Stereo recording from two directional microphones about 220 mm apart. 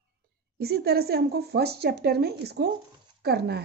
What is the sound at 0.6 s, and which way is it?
Speech, 45° right (ahead or behind).